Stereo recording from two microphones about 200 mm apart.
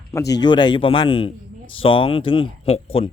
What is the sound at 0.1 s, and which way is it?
Speech, 15° left (ahead or behind).